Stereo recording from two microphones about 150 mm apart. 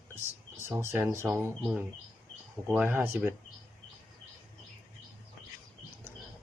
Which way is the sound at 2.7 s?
10° right (ahead or behind).